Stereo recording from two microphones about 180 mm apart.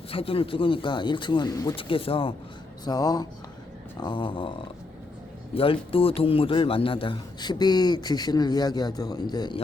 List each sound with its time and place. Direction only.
0.1 s a man's voice: 30° left (ahead or behind)